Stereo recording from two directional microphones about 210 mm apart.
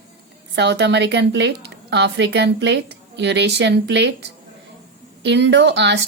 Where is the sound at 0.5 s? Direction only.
55° right (ahead or behind).